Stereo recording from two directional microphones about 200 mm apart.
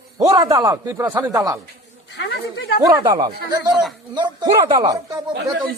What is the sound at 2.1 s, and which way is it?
Speech, 55° left (ahead or behind).